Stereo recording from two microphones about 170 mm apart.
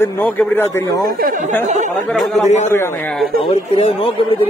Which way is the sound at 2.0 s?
5° left (ahead or behind).